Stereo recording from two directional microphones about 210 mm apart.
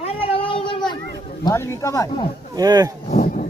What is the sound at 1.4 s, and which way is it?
Speech, 15° left (ahead or behind).